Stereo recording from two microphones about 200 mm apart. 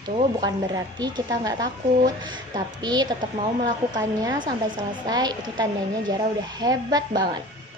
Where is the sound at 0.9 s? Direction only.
20° right (ahead or behind).